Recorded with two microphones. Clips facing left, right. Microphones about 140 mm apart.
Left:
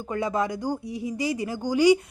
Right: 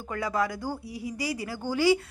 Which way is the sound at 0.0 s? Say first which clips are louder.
Left 3 dB; 20° left (ahead or behind).